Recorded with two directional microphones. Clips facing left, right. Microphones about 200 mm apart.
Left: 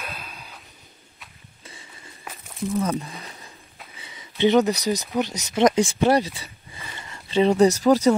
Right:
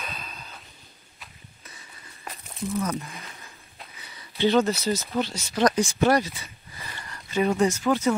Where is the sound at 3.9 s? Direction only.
20° left (ahead or behind).